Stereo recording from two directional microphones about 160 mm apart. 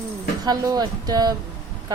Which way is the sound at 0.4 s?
25° right (ahead or behind).